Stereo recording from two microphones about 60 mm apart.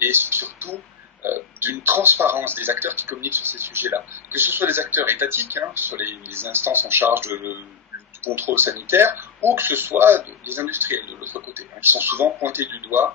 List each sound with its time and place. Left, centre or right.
0.0 s speech: right